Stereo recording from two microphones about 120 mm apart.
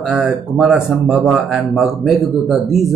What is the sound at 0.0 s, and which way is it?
Speech, 5° right (ahead or behind).